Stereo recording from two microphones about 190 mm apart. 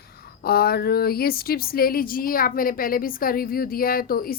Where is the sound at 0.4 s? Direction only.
55° left (ahead or behind).